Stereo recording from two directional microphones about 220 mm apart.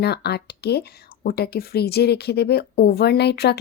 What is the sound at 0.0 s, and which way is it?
Speech, 50° left (ahead or behind).